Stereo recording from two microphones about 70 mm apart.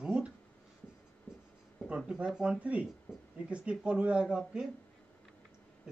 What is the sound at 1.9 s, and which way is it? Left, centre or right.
Speech, centre.